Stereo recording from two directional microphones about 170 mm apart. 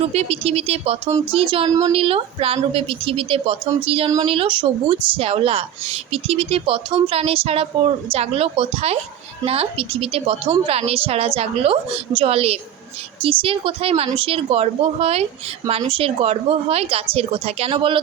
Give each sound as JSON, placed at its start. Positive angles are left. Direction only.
{"t": 0.1, "sound": "a woman's voice", "side_deg": -35}